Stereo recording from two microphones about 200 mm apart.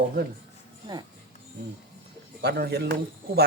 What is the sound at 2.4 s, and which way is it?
A man's voice, 50° right (ahead or behind).